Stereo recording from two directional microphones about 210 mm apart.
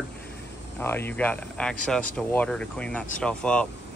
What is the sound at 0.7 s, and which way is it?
Speech, 10° left (ahead or behind).